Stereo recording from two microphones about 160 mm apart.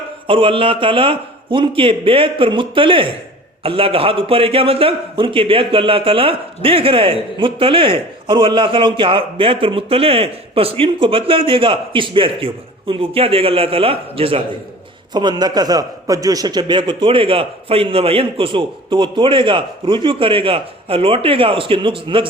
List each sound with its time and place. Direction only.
0.3 s a man's voice: 35° right (ahead or behind)